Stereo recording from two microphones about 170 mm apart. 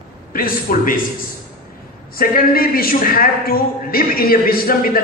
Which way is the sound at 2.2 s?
60° left (ahead or behind).